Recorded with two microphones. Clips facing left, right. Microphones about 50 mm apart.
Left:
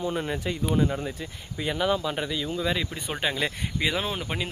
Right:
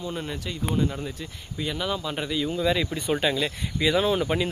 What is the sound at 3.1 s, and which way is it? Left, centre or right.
Speech, centre.